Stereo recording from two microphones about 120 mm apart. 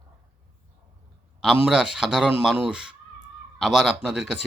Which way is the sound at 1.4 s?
5° right (ahead or behind).